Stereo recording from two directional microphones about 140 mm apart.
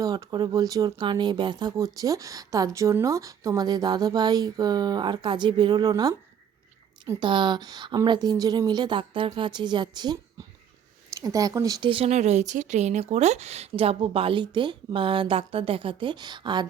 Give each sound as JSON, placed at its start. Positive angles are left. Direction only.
{"t": 0.0, "sound": "speech", "side_deg": -25}
{"t": 7.2, "sound": "speech", "side_deg": -35}
{"t": 11.9, "sound": "speech", "side_deg": -45}